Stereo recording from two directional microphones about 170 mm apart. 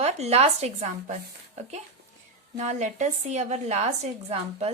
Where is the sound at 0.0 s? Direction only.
40° right (ahead or behind).